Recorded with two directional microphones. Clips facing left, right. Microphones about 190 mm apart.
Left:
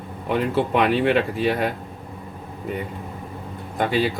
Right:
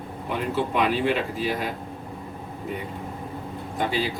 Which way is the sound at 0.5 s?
60° left (ahead or behind).